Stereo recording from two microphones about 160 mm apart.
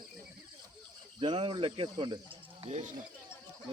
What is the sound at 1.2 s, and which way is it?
Speech, 30° right (ahead or behind).